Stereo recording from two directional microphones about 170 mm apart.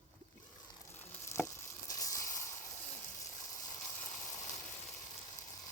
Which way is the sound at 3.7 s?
45° left (ahead or behind).